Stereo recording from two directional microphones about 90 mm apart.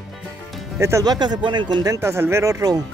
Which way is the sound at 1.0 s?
50° right (ahead or behind).